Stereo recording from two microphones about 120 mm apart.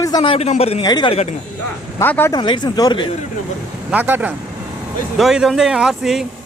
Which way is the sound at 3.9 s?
15° right (ahead or behind).